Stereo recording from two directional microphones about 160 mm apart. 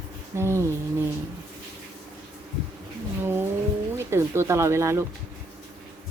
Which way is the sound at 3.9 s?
15° right (ahead or behind).